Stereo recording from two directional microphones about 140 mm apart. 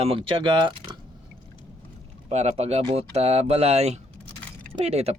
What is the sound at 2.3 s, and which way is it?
Speech, 50° right (ahead or behind).